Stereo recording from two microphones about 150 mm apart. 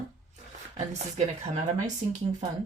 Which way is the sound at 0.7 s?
50° right (ahead or behind).